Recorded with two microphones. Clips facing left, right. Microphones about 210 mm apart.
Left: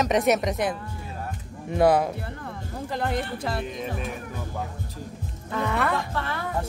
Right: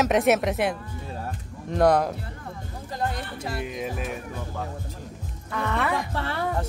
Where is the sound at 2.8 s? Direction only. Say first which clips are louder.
Left 1 dB; 65° left (ahead or behind).